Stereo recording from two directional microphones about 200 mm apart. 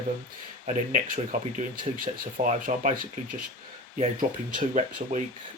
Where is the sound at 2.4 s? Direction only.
40° right (ahead or behind).